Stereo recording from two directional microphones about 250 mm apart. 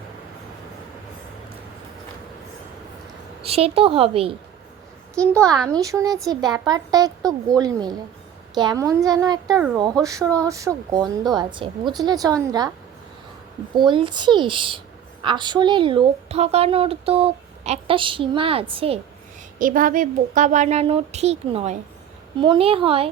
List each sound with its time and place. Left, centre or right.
3.4 s a woman's voice: right
5.2 s a child's voice: centre
5.6 s speech: centre
13.7 s a woman's voice: centre
19.5 s a woman's voice: right